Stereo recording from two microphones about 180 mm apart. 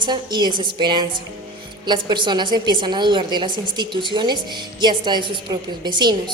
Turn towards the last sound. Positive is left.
turn(degrees=-25)  # may be behind; listen again after turning